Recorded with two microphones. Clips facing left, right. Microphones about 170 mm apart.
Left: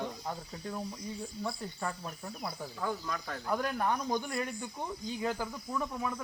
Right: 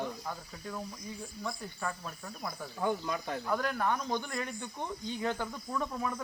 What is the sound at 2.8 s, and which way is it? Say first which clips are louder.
Speech: right 4 dB; 20° right (ahead or behind).